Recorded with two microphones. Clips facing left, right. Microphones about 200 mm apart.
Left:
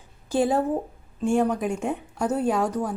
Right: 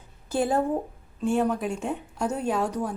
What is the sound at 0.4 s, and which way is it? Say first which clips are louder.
A woman's voice: right 1 dB; 10° left (ahead or behind).